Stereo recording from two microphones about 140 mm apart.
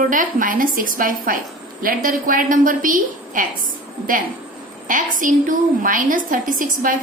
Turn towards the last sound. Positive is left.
turn(degrees=-75)  # may be behind; listen again after turning